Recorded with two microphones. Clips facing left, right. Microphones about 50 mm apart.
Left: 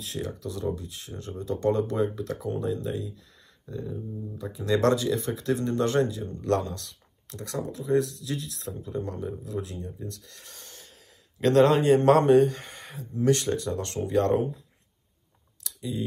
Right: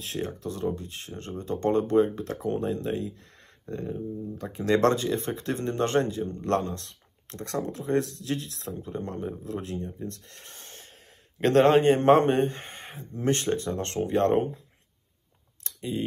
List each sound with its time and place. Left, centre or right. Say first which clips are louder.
0.0 s a sound: right 2 dB; right
0.3 s speech: right 1 dB; right
4.6 s speech: right 1 dB; right
10.0 s a sound: right 2 dB; right
11.3 s speech: right 1 dB; right
15.6 s typing: right 2 dB; right